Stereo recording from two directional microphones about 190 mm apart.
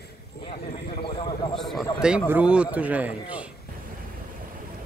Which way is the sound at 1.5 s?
Centre (ahead or behind).